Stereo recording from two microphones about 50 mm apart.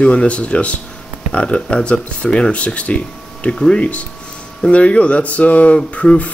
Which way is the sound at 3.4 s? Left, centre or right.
Centre.